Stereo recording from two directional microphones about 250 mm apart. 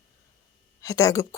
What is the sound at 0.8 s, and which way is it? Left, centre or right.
Speech, centre.